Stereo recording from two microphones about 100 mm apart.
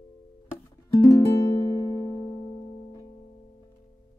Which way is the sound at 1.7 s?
25° left (ahead or behind).